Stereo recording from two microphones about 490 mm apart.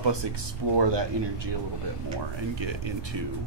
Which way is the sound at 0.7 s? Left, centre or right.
Right.